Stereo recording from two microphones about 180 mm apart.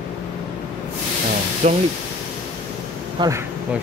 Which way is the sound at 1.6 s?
35° right (ahead or behind).